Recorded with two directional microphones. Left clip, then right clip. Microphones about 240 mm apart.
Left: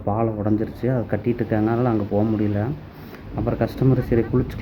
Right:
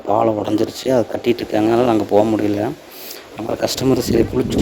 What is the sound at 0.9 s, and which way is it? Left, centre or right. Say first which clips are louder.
Speech: right 9 dB; right.